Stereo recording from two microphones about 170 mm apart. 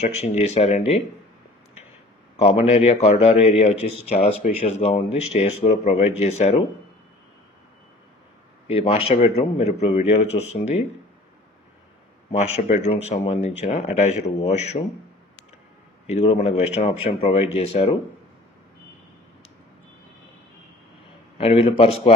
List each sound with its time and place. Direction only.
0.3 s speech: 40° left (ahead or behind)
2.4 s speech: 40° left (ahead or behind)
8.6 s speech: 35° left (ahead or behind)
12.6 s speech: 45° left (ahead or behind)
16.1 s speech: 40° left (ahead or behind)
21.4 s speech: 35° left (ahead or behind)